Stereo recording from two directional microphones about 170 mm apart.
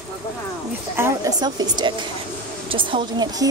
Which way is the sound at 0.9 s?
15° right (ahead or behind).